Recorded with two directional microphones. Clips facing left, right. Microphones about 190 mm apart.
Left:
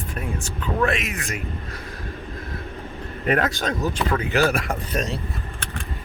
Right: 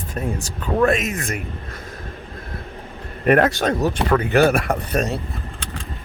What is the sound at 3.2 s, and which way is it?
A man's voice, 65° right (ahead or behind).